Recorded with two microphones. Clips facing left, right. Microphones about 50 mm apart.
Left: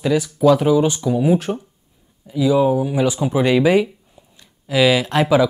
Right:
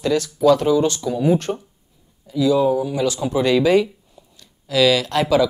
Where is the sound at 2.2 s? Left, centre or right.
Centre.